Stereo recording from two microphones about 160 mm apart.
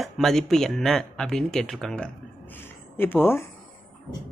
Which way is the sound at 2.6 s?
15° left (ahead or behind).